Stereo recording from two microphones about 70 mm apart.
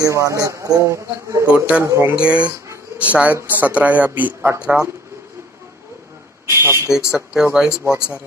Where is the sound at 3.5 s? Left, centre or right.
Right.